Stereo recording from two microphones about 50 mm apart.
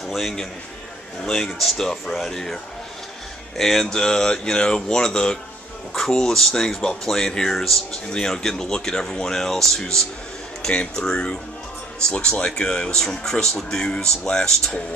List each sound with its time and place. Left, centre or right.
0.1 s a man's voice: centre
8.1 s speech: centre
10.7 s speech: left